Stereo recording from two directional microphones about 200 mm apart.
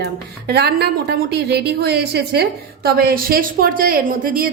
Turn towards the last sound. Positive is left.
turn(degrees=-45)  # may be behind; listen again after turning